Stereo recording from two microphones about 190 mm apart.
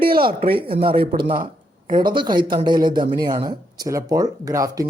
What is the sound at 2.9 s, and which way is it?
Speech, 50° right (ahead or behind).